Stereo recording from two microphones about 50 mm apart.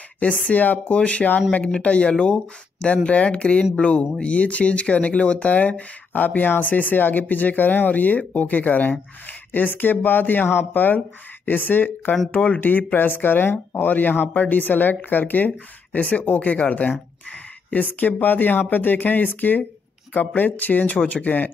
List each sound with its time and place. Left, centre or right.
0.5 s speech: left